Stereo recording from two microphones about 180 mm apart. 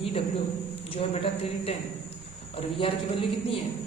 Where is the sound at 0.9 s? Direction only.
30° left (ahead or behind).